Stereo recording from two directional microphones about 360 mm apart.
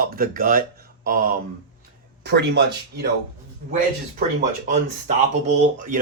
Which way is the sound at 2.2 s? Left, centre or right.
Right.